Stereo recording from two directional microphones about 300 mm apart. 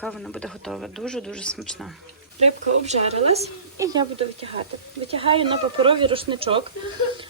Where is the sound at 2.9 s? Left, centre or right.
Right.